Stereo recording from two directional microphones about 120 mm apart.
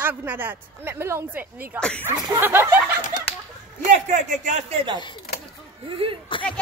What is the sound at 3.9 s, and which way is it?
Speech, 90° right.